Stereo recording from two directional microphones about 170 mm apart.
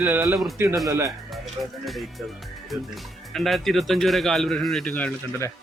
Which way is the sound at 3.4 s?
Centre (ahead or behind).